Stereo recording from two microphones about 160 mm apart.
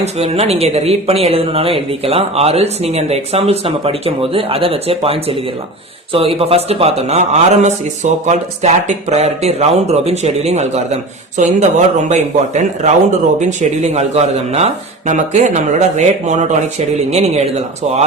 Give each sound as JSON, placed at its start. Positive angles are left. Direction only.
{"t": 0.0, "sound": "speech", "side_deg": -40}